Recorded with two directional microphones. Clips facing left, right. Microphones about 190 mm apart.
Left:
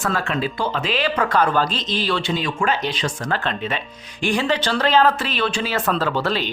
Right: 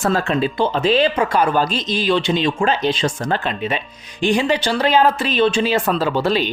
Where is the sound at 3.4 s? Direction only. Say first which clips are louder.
Right 2 dB; 10° right (ahead or behind).